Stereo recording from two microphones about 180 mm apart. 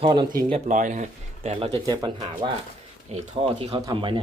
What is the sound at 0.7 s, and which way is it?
Speech, 45° right (ahead or behind).